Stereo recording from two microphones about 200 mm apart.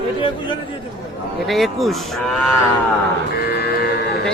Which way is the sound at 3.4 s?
50° left (ahead or behind).